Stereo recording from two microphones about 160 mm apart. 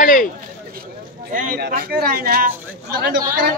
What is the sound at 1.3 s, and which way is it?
Speech, 55° right (ahead or behind).